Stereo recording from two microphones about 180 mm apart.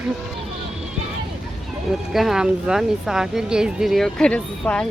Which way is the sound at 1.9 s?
Centre (ahead or behind).